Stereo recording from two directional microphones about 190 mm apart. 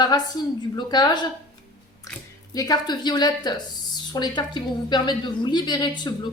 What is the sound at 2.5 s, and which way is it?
A woman's voice, 20° left (ahead or behind).